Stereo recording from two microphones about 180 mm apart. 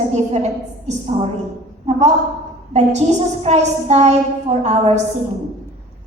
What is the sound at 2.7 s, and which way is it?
A woman's voice, 35° right (ahead or behind).